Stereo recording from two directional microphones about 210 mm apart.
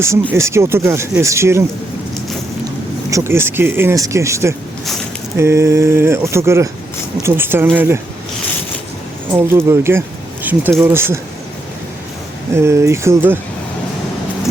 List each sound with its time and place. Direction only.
0.0 s speech: 15° right (ahead or behind)
3.1 s speech: 15° right (ahead or behind)
9.3 s speech: 10° right (ahead or behind)
12.6 s speech: 15° right (ahead or behind)